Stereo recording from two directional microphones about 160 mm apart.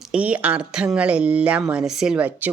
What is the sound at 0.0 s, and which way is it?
Speech, 5° right (ahead or behind).